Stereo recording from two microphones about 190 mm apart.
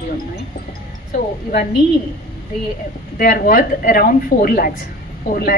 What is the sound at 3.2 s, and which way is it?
A woman's voice, 50° left (ahead or behind).